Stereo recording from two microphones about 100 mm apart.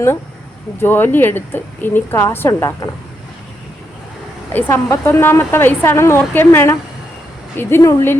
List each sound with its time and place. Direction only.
0.8 s a woman's voice: 20° left (ahead or behind)
2.5 s a woman's voice: 35° left (ahead or behind)
4.5 s a woman's voice: 25° left (ahead or behind)